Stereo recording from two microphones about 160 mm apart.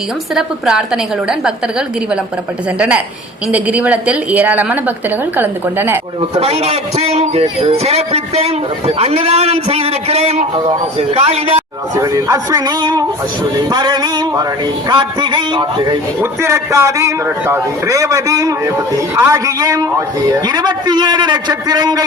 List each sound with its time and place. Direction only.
0.3 s a woman's voice: 5° right (ahead or behind)
2.7 s a woman's voice: 5° right (ahead or behind)
6.3 s a man's voice: 40° right (ahead or behind)
11.9 s a man's voice: 20° right (ahead or behind)
16.2 s a man's voice: 15° right (ahead or behind)